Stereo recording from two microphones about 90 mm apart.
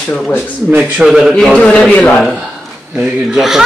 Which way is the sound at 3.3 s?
5° right (ahead or behind).